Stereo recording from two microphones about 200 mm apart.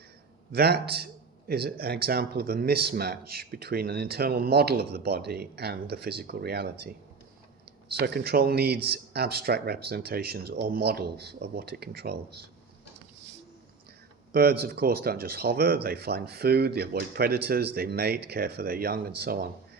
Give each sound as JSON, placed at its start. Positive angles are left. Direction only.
{"t": 0.5, "sound": "speech", "side_deg": -55}
{"t": 14.3, "sound": "speech", "side_deg": -50}